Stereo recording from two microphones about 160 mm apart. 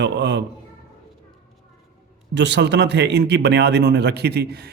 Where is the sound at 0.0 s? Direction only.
90° right.